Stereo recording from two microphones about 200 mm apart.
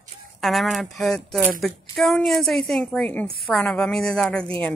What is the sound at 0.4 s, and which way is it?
Speech, centre (ahead or behind).